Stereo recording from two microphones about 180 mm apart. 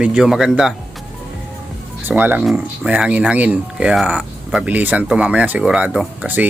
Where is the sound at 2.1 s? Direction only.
10° right (ahead or behind).